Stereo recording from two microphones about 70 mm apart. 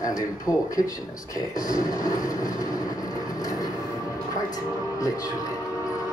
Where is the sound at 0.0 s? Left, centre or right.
Left.